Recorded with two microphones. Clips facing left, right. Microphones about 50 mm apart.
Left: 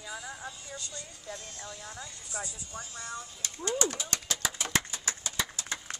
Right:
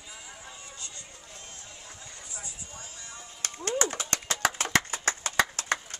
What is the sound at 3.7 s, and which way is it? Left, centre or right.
Speech, right.